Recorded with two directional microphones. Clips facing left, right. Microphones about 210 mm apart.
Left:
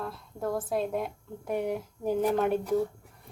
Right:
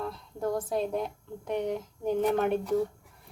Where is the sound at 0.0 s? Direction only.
Centre (ahead or behind).